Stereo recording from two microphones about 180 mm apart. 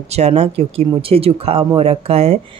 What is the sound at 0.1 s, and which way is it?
Speech, 35° right (ahead or behind).